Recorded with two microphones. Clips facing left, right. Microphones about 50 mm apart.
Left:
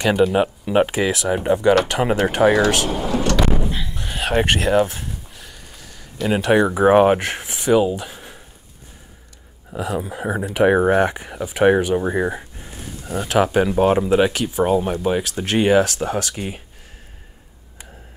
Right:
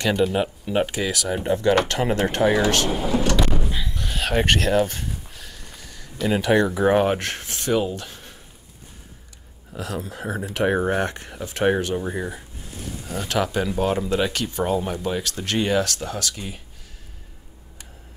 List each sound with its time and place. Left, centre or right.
0.2 s speech: centre
2.9 s speech: centre
3.3 s a sound: centre
6.5 s speech: left
9.8 s speech: centre
12.1 s speech: left
13.1 s speech: centre
13.4 s speech: left
14.1 s speech: centre; by 16.6 s left